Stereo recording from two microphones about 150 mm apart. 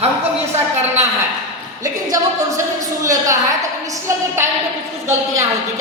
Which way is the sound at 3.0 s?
20° right (ahead or behind).